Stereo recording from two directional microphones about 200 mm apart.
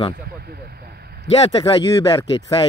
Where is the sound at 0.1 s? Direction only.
50° right (ahead or behind).